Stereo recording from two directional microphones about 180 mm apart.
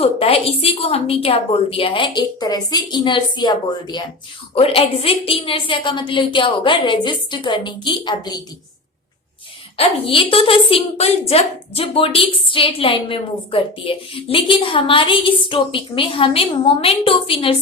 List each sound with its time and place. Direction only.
0.0 s a woman's voice: 35° left (ahead or behind)
4.5 s a woman's voice: 30° left (ahead or behind)
9.7 s a woman's voice: 30° left (ahead or behind)